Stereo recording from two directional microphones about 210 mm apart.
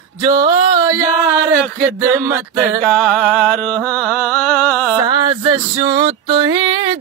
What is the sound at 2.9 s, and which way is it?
Music, centre (ahead or behind).